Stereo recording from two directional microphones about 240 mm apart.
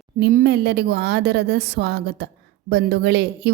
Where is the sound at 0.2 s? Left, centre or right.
Right.